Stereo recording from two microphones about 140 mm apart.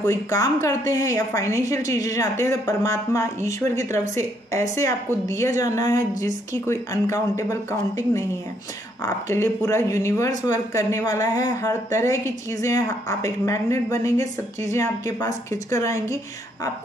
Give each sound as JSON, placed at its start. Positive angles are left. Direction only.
{"t": 0.0, "sound": "a woman's voice", "side_deg": 25}
{"t": 9.0, "sound": "a woman's voice", "side_deg": 20}